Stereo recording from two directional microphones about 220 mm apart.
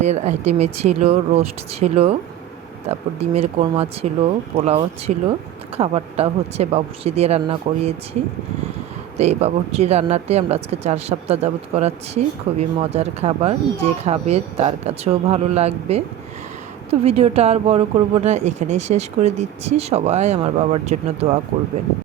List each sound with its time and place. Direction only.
0.0 s speech: 30° right (ahead or behind)
9.1 s speech: 30° right (ahead or behind)